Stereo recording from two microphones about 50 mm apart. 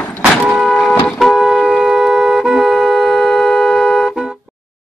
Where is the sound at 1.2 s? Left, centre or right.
Centre.